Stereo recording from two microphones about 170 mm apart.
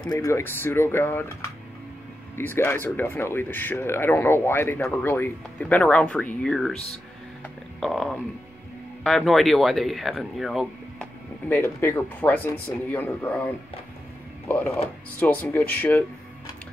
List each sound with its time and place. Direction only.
0.1 s speech: 20° left (ahead or behind)
2.3 s speech: 15° left (ahead or behind)
7.8 s speech: centre (ahead or behind)
11.4 s speech: 10° left (ahead or behind)
15.1 s speech: 10° left (ahead or behind)